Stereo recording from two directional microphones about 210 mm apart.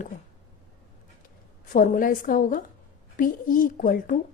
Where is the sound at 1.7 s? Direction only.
40° left (ahead or behind).